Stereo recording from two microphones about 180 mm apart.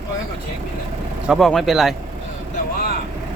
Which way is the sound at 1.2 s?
Centre (ahead or behind).